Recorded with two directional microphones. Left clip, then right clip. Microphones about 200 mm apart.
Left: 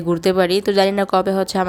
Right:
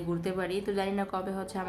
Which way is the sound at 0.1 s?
50° left (ahead or behind).